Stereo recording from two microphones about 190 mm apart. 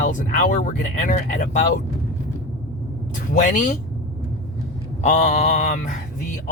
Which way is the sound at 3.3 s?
45° left (ahead or behind).